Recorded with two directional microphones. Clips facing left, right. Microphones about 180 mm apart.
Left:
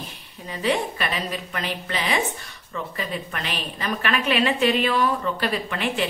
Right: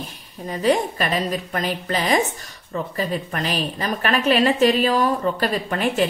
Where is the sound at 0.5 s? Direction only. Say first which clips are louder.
Right 5 dB; 40° right (ahead or behind).